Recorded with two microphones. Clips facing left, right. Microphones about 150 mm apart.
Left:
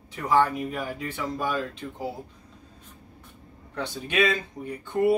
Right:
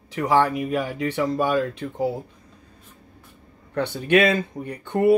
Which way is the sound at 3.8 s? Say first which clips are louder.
Right 7 dB; 60° right (ahead or behind).